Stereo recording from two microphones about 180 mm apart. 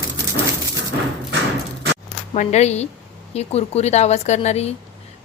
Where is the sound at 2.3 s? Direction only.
40° left (ahead or behind).